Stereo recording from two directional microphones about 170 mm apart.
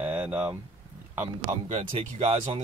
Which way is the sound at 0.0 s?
10° right (ahead or behind).